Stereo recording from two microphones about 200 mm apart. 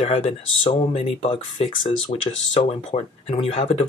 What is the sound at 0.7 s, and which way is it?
Speech, 25° left (ahead or behind).